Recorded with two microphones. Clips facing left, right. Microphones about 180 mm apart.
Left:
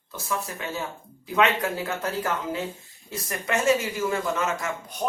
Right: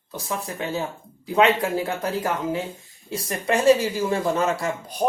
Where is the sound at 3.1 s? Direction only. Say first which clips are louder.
Right 4 dB; 30° right (ahead or behind).